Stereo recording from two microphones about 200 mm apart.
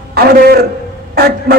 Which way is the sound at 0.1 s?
50° right (ahead or behind).